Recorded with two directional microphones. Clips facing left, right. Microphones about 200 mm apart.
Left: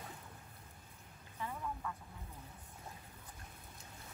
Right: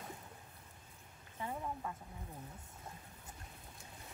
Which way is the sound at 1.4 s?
30° right (ahead or behind).